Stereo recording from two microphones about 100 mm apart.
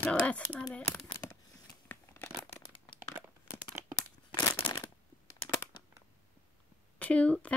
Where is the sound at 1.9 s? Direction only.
20° left (ahead or behind).